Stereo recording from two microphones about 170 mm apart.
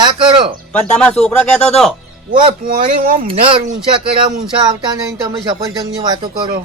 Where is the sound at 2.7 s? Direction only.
55° right (ahead or behind).